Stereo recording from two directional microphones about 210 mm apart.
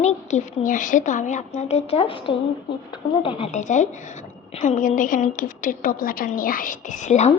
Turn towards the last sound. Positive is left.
turn(degrees=35)  # may be behind; listen again after turning